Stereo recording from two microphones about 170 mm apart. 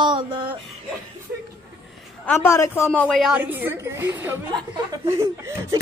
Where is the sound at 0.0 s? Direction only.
25° right (ahead or behind).